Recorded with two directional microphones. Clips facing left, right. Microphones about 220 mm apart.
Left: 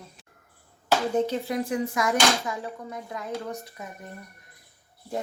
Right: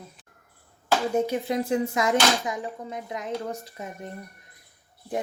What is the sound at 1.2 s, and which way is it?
Speech, 10° right (ahead or behind).